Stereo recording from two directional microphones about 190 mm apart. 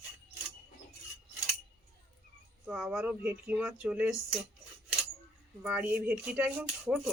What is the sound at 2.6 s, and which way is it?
Speech, 5° right (ahead or behind).